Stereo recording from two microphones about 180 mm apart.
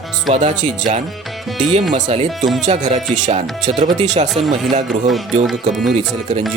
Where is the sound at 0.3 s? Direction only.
40° right (ahead or behind).